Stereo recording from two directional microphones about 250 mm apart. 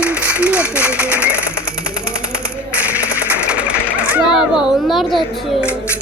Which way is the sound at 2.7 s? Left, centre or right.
Centre.